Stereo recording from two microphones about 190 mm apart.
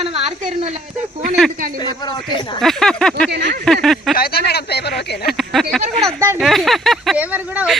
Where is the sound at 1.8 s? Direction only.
25° left (ahead or behind).